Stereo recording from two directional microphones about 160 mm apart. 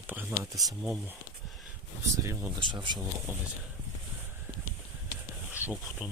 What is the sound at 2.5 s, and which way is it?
Speech, 30° right (ahead or behind).